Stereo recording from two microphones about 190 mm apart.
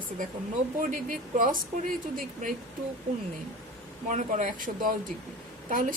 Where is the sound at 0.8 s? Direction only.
45° right (ahead or behind).